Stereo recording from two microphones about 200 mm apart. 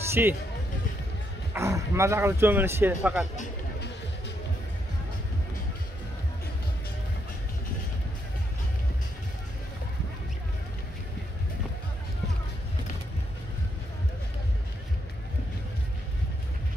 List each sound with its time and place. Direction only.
0.1 s speech: 10° right (ahead or behind)
1.5 s speech: 15° right (ahead or behind)